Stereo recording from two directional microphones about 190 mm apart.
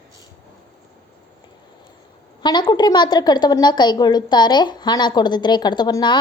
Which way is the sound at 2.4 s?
20° left (ahead or behind).